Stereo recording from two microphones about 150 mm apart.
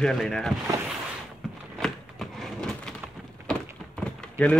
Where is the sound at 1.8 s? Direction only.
5° left (ahead or behind).